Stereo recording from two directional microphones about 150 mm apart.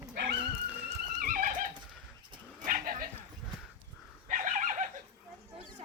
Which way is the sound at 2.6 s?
65° right (ahead or behind).